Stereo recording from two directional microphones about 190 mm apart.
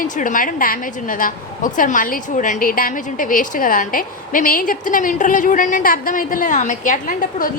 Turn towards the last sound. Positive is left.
turn(degrees=45)  # may be behind; listen again after turning